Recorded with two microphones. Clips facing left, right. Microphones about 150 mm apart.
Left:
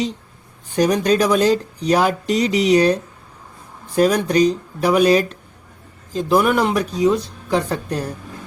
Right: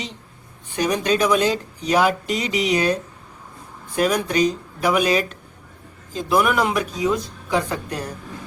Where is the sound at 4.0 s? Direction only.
35° left (ahead or behind).